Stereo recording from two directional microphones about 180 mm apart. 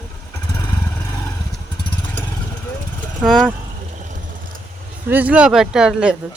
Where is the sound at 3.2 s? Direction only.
Centre (ahead or behind).